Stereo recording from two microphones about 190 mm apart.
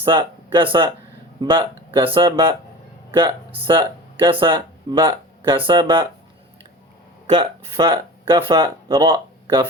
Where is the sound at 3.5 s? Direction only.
25° right (ahead or behind).